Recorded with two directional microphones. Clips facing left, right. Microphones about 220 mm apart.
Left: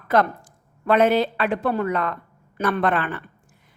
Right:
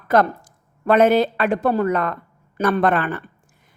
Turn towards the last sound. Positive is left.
turn(degrees=-45)  # may be behind; listen again after turning